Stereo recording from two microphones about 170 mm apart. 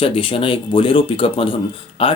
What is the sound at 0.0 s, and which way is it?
Speech, 30° left (ahead or behind).